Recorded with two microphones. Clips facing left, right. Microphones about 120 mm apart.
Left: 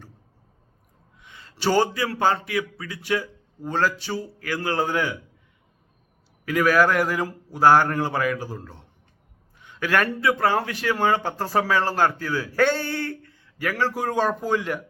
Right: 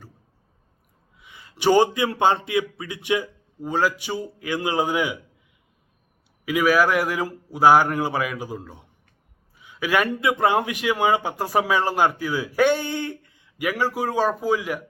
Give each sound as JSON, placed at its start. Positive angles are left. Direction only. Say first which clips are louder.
{"t": 1.2, "sound": "a man's voice", "louder": "right 3 dB", "side_deg": -10}
{"t": 6.4, "sound": "a man's voice", "louder": "even", "side_deg": -10}